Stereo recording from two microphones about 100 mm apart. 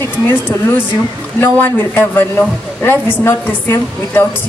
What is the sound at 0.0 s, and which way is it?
A woman's voice, 20° left (ahead or behind).